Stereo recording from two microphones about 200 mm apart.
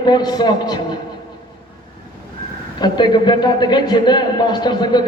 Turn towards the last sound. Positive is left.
turn(degrees=20)  # may be behind; listen again after turning